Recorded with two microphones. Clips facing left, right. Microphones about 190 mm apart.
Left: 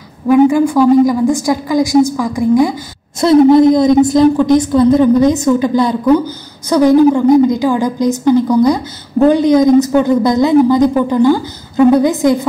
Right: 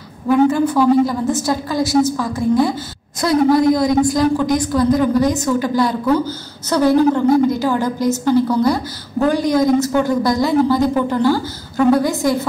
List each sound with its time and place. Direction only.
0.3 s a woman's voice: 10° left (ahead or behind)